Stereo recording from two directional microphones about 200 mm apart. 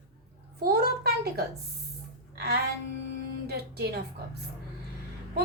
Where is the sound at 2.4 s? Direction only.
55° right (ahead or behind).